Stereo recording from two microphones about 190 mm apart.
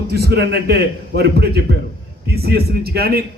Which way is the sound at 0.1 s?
55° right (ahead or behind).